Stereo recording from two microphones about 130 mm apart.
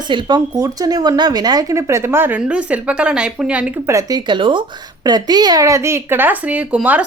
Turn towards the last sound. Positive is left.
turn(degrees=-10)  # may be behind; listen again after turning